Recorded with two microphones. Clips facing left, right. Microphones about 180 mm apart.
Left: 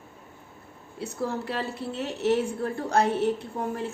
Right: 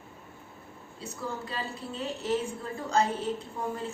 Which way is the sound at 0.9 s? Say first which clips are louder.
Left 7 dB; 70° left (ahead or behind).